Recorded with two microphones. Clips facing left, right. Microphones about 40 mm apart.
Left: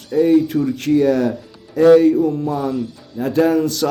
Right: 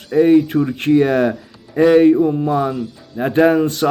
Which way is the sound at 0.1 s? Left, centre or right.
Right.